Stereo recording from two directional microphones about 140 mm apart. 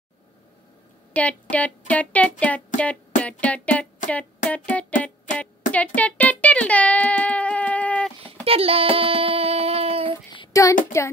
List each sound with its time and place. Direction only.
1.1 s speech: 10° left (ahead or behind)
5.0 s music: 10° left (ahead or behind)
8.5 s a sound: 45° right (ahead or behind)
10.5 s speech: 25° left (ahead or behind)